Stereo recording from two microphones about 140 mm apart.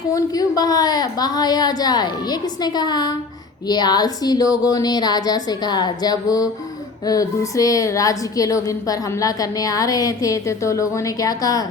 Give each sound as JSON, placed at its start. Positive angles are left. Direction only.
{"t": 0.1, "sound": "a woman's voice", "side_deg": 25}